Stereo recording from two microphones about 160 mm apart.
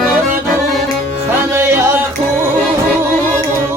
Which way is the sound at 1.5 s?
15° right (ahead or behind).